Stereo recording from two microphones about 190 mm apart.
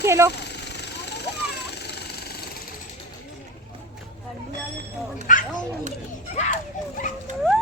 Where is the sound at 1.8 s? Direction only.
60° left (ahead or behind).